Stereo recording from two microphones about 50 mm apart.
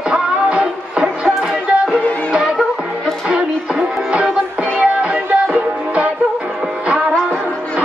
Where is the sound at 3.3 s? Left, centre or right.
Centre.